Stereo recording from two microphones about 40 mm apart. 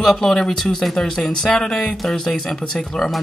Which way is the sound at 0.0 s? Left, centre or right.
Centre.